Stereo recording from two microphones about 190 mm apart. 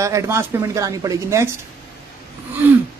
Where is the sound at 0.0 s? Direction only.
15° right (ahead or behind).